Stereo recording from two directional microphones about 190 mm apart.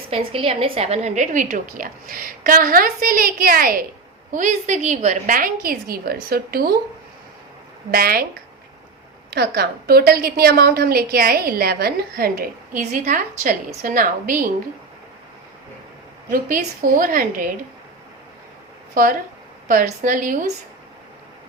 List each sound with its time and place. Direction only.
0.1 s a woman's voice: 30° right (ahead or behind); by 6.7 s 50° right (ahead or behind)
7.9 s a woman's voice: 50° right (ahead or behind)
9.3 s a woman's voice: 55° right (ahead or behind)
12.8 s a woman's voice: 40° right (ahead or behind)
16.3 s a woman's voice: 45° right (ahead or behind)
19.6 s a woman's voice: 45° right (ahead or behind)